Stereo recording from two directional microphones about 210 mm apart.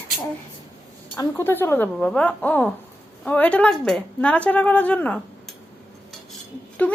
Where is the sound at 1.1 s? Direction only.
10° left (ahead or behind).